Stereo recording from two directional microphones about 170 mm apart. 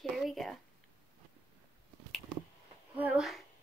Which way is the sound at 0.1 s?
Centre (ahead or behind).